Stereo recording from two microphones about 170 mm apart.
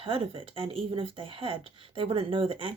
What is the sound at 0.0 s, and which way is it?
Speech, 30° right (ahead or behind).